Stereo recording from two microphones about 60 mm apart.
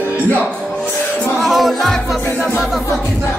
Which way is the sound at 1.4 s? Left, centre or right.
Centre.